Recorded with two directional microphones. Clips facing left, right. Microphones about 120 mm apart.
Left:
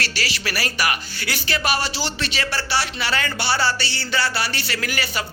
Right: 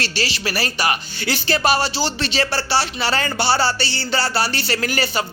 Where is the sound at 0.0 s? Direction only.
25° right (ahead or behind).